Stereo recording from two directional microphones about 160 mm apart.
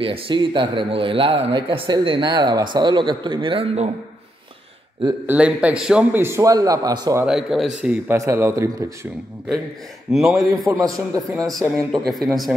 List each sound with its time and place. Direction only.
0.0 s a man's voice: 35° right (ahead or behind)
5.2 s a man's voice: 10° right (ahead or behind)
7.2 s speech: centre (ahead or behind)
8.2 s a man's voice: 15° right (ahead or behind)
10.1 s speech: centre (ahead or behind)
10.7 s a man's voice: 20° right (ahead or behind)
11.7 s speech: centre (ahead or behind)